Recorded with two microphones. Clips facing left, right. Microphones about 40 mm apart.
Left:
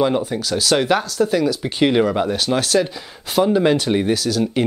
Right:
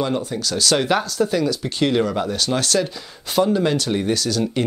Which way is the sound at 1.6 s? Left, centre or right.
Centre.